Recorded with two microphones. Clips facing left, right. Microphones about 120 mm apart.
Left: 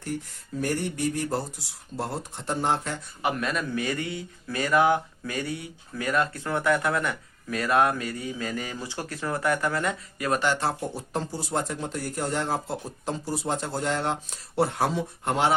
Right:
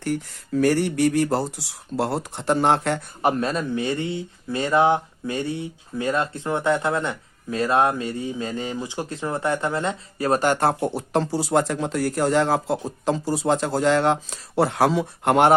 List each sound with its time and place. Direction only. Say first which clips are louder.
0.0 s speech: right 7 dB; 90° right; by 3.0 s 70° right (ahead or behind)
3.2 s speech: right 3 dB; 35° right (ahead or behind)
10.4 s speech: right 6 dB; 55° right (ahead or behind)